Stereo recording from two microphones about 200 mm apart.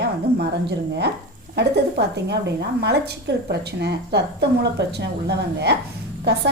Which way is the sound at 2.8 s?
55° right (ahead or behind).